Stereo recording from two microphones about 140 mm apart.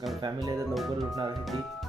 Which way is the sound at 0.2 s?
25° right (ahead or behind).